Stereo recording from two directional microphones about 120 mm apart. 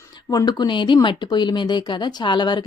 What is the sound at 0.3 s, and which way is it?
Speech, 35° left (ahead or behind).